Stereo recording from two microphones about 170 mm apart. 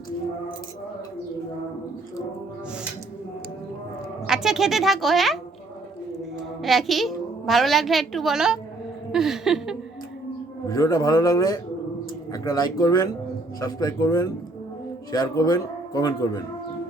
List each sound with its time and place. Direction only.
4.3 s speech: centre (ahead or behind)
6.6 s a child's voice: centre (ahead or behind)
10.7 s a man's voice: 20° left (ahead or behind)